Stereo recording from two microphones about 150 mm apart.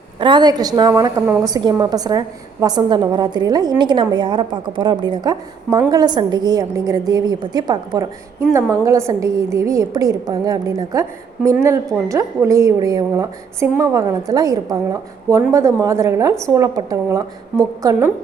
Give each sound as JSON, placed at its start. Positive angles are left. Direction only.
{"t": 0.2, "sound": "a woman's voice", "side_deg": -30}
{"t": 12.0, "sound": "a woman's voice", "side_deg": -20}